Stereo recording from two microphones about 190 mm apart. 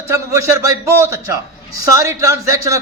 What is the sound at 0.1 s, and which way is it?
A man's voice, 15° right (ahead or behind).